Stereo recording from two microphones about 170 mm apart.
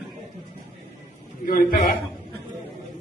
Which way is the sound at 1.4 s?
55° left (ahead or behind).